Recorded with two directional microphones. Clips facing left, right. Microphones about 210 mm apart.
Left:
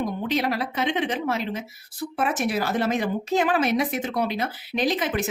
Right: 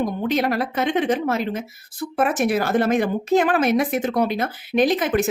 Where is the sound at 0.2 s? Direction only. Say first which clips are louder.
Right 4 dB; 50° right (ahead or behind).